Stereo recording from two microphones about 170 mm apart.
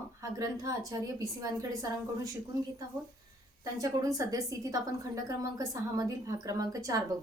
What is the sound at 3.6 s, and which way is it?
A woman's voice, 20° right (ahead or behind).